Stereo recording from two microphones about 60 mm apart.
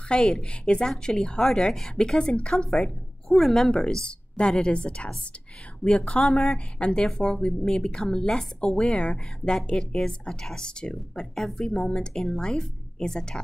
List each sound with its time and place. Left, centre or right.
0.1 s speech: centre
3.7 s speech: centre